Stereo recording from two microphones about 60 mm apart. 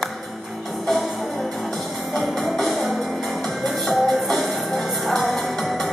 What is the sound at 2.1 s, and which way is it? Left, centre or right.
Music, centre.